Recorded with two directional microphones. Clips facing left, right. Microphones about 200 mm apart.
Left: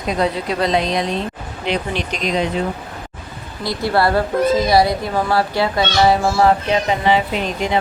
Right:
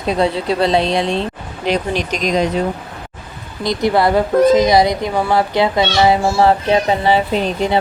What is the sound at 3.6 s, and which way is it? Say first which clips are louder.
Speech: right 3 dB; 20° right (ahead or behind).